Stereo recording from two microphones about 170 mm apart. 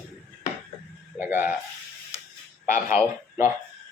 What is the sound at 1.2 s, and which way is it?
Speech, 10° right (ahead or behind).